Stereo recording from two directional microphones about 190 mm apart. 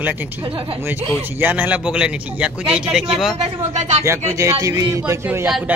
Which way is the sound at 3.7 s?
35° right (ahead or behind).